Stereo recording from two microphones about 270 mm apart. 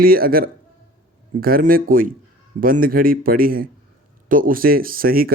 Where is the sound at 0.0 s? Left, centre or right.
Right.